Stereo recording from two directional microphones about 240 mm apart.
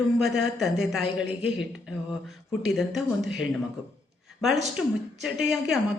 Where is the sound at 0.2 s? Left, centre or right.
Centre.